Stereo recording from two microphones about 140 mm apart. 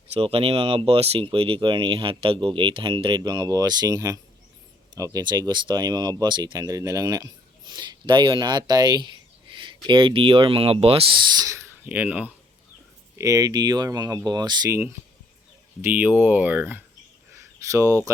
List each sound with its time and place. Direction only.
0.1 s speech: 45° right (ahead or behind)
11.3 s speech: 20° right (ahead or behind)
13.1 s speech: 25° right (ahead or behind)
15.8 s speech: 10° right (ahead or behind)